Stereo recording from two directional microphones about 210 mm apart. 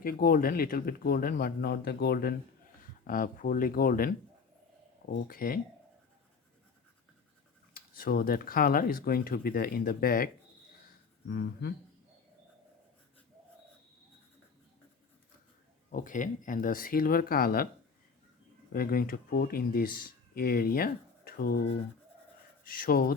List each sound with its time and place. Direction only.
0.0 s speech: 45° left (ahead or behind)
5.1 s speech: 45° left (ahead or behind)
7.9 s speech: 45° left (ahead or behind)
11.3 s speech: 50° left (ahead or behind)
15.9 s speech: 40° left (ahead or behind)
18.7 s speech: 45° left (ahead or behind)
22.6 s speech: 45° left (ahead or behind)